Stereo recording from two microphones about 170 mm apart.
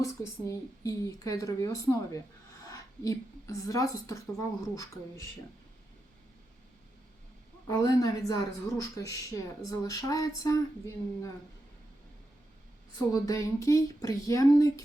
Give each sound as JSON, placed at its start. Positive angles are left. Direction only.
{"t": 0.0, "sound": "a woman's voice", "side_deg": 20}
{"t": 7.7, "sound": "a woman's voice", "side_deg": 20}
{"t": 13.2, "sound": "a woman's voice", "side_deg": 20}